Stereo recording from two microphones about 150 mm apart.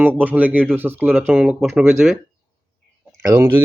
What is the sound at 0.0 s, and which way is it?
Speech, 10° right (ahead or behind).